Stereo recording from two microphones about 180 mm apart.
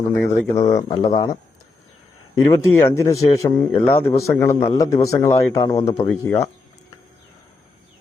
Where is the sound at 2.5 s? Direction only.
15° left (ahead or behind).